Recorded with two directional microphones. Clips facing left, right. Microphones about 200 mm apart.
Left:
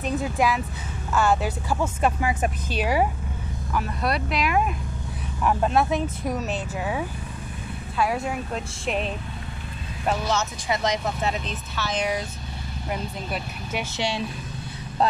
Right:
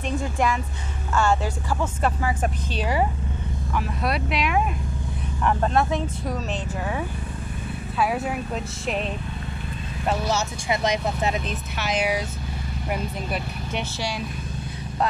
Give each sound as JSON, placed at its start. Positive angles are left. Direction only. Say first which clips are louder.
{"t": 0.0, "sound": "speech", "louder": "left 1 dB", "side_deg": 5}
{"t": 3.7, "sound": "speech", "louder": "even", "side_deg": 0}
{"t": 10.7, "sound": "speech", "louder": "right 1 dB", "side_deg": -20}
{"t": 13.9, "sound": "speech", "louder": "left 2 dB", "side_deg": 25}